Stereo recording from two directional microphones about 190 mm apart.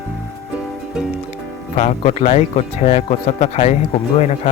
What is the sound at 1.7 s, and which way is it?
Speech, 40° left (ahead or behind).